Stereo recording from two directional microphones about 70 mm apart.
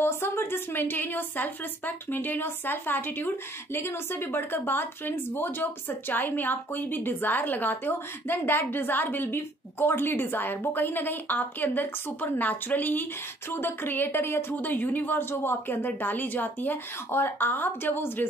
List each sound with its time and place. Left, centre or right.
0.0 s a woman's voice: left